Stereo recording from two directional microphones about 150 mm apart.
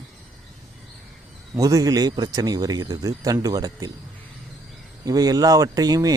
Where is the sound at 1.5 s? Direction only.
20° right (ahead or behind).